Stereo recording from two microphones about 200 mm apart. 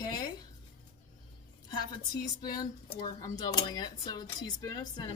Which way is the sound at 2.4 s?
20° left (ahead or behind).